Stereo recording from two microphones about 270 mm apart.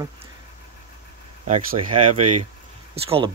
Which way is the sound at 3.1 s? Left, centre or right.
Right.